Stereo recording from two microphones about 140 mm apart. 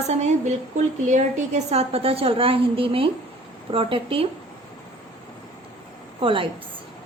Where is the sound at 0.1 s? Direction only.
55° right (ahead or behind).